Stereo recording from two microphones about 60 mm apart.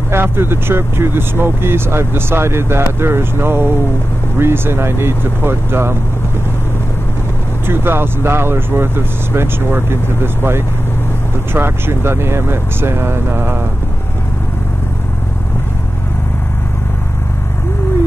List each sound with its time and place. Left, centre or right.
0.1 s speech: right
7.6 s speech: right